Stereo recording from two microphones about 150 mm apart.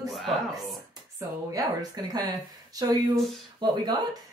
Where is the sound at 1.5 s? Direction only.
25° right (ahead or behind).